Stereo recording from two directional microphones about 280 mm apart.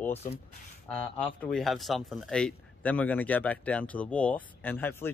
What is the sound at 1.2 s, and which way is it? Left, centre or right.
Speech, centre.